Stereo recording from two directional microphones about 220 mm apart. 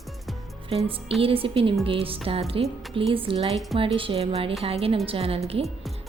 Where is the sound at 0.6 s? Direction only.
25° right (ahead or behind).